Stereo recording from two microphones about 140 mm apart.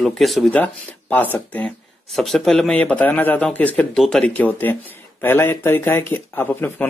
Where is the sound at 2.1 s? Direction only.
Centre (ahead or behind).